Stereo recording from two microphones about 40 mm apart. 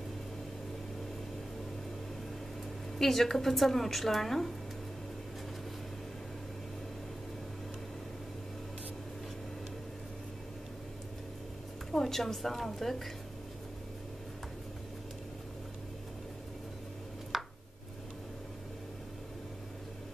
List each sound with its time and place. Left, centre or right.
3.0 s a woman's voice: centre
11.9 s a woman's voice: centre
17.3 s a sound: centre